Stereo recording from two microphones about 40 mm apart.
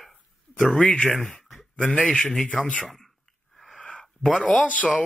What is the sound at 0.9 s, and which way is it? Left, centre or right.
Speech, centre.